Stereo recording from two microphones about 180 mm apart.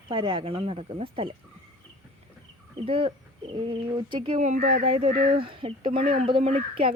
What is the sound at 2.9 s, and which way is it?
Speech, 30° right (ahead or behind).